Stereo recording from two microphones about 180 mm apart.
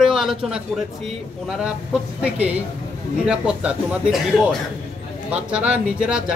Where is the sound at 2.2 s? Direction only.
10° right (ahead or behind).